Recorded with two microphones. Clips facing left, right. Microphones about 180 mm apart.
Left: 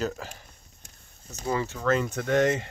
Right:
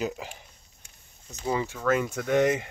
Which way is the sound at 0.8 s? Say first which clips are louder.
Left 3 dB; 40° left (ahead or behind).